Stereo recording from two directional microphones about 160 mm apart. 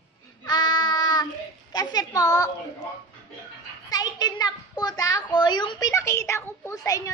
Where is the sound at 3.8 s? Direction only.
25° left (ahead or behind).